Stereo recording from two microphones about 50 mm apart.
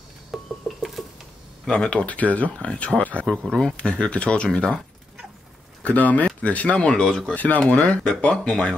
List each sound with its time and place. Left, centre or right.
0.3 s a sound: centre
1.7 s speech: left
3.3 s speech: centre
5.9 s speech: left; by 7.3 s centre
7.3 s speech: left